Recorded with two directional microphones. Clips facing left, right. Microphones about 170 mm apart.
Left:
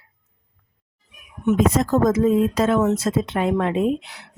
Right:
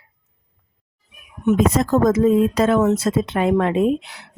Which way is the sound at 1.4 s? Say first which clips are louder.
Right 1 dB; 70° right (ahead or behind).